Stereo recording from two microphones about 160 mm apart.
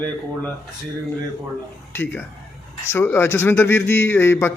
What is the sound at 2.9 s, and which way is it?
Speech, 15° left (ahead or behind).